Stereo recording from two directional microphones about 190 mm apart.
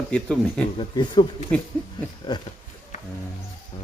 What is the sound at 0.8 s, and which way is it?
Speech, 25° left (ahead or behind).